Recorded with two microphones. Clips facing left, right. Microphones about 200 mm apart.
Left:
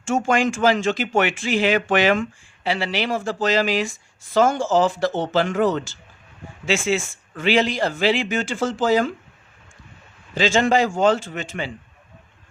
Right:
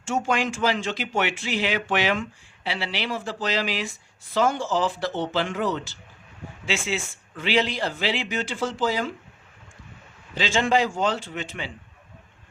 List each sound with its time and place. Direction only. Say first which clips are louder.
0.0 s speech: left 5 dB; 50° left (ahead or behind)
10.3 s speech: left 4 dB; 45° left (ahead or behind)